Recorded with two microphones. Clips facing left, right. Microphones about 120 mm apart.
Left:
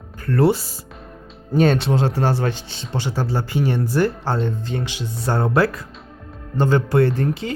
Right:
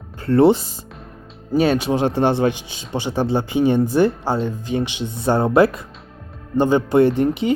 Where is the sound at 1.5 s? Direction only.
5° right (ahead or behind).